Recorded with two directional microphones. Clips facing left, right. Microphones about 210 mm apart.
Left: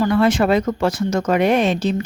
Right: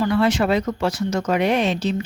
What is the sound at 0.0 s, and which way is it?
Speech, 50° left (ahead or behind).